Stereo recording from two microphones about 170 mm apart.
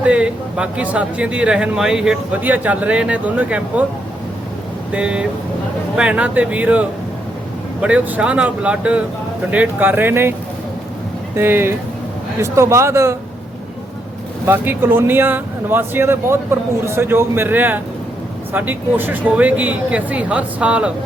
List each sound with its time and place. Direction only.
0.0 s speech: 5° right (ahead or behind)
4.9 s speech: 5° right (ahead or behind)
11.3 s speech: 15° right (ahead or behind)
14.4 s speech: 10° right (ahead or behind)